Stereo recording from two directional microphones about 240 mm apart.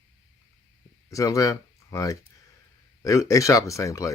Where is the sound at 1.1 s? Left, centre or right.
Centre.